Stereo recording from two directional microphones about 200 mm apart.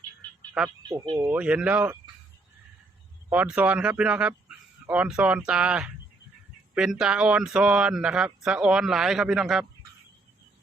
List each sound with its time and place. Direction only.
0.9 s speech: 25° right (ahead or behind)
1.1 s speech: 5° right (ahead or behind)
3.2 s a man's voice: 5° right (ahead or behind)